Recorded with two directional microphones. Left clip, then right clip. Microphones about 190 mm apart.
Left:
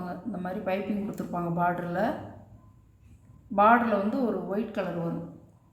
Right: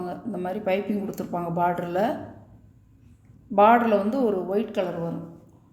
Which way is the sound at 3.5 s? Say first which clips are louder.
Right 4 dB; 45° right (ahead or behind).